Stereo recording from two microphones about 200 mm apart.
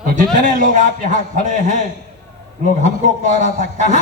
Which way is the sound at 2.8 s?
35° right (ahead or behind).